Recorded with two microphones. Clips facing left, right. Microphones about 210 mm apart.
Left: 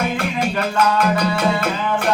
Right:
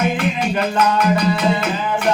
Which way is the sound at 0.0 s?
20° right (ahead or behind).